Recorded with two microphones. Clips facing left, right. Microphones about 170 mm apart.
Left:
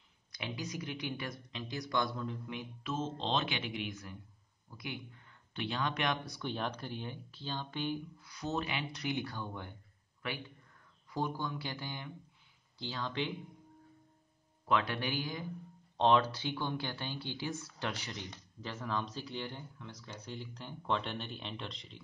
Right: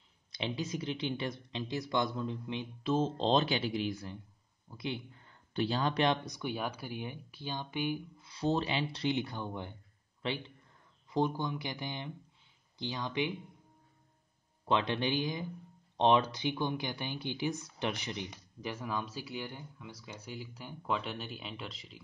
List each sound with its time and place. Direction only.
0.3 s speech: 25° right (ahead or behind)
6.2 s speech: 15° right (ahead or behind)
8.2 s speech: 25° right (ahead or behind)
14.7 s speech: 20° right (ahead or behind); by 22.0 s 5° right (ahead or behind)